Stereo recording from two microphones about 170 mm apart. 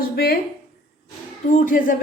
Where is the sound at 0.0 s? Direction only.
65° left (ahead or behind).